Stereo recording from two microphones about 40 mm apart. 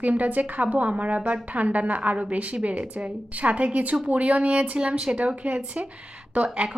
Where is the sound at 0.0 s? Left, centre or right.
Right.